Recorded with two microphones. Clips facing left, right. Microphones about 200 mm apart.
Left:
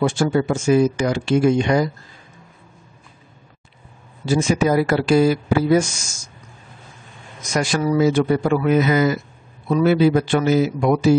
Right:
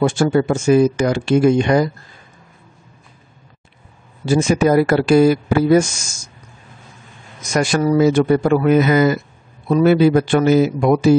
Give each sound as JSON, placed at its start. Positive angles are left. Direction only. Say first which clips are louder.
{"t": 0.0, "sound": "speech", "louder": "right 3 dB", "side_deg": -50}
{"t": 4.3, "sound": "speech", "louder": "right 3 dB", "side_deg": -50}
{"t": 7.5, "sound": "speech", "louder": "right 3 dB", "side_deg": -50}